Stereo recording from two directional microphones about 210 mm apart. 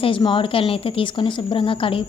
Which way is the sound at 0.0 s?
25° left (ahead or behind).